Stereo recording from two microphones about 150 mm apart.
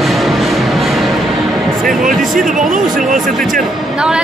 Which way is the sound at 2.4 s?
60° right (ahead or behind).